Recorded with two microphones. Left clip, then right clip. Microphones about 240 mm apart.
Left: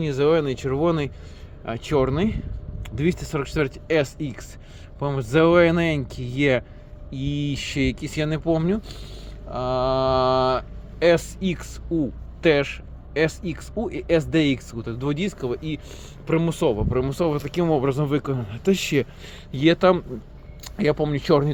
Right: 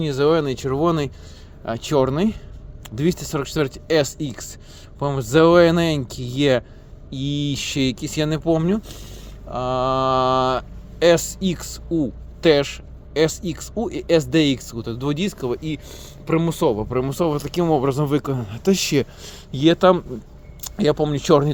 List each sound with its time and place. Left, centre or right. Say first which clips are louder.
0.0 s speech: right 2 dB; right